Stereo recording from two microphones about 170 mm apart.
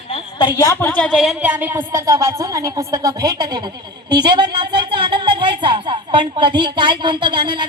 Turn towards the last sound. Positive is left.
turn(degrees=-30)  # may be behind; listen again after turning